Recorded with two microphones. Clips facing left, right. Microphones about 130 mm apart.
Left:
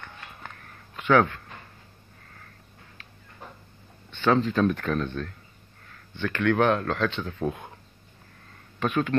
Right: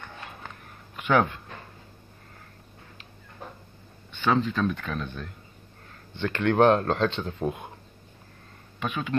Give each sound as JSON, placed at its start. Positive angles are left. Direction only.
{"t": 0.9, "sound": "speech", "side_deg": -10}
{"t": 4.1, "sound": "speech", "side_deg": -5}
{"t": 6.1, "sound": "speech", "side_deg": -25}
{"t": 8.7, "sound": "speech", "side_deg": -5}